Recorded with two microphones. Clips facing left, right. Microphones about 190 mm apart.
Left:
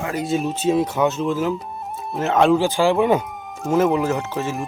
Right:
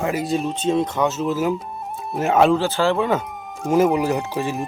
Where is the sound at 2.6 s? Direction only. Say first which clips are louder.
Left 2 dB; 15° left (ahead or behind).